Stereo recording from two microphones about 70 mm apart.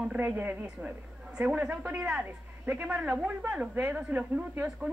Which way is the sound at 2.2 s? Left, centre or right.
Right.